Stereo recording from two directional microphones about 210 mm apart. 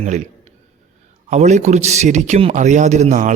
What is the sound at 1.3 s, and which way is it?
Speech, 35° right (ahead or behind).